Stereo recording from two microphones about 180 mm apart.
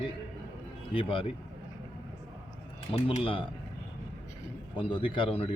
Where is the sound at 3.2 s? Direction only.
30° left (ahead or behind).